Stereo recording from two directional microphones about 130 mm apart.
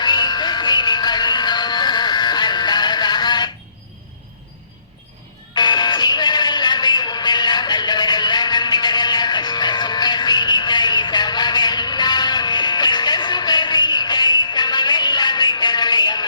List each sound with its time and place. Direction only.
0.0 s music: 35° left (ahead or behind)
5.5 s music: 35° left (ahead or behind)